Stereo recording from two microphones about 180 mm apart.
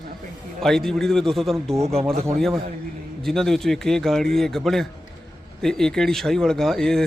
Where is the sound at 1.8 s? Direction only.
35° right (ahead or behind).